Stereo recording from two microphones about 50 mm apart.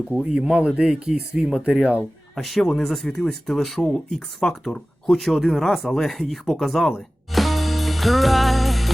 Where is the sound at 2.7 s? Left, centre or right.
Centre.